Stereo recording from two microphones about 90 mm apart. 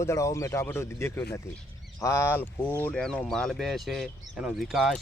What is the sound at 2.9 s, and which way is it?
Speech, 10° left (ahead or behind).